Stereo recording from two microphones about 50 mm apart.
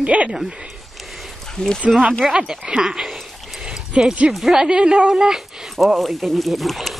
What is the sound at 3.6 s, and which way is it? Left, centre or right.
Dog, centre.